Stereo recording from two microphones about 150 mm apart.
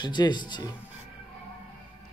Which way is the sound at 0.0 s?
30° left (ahead or behind).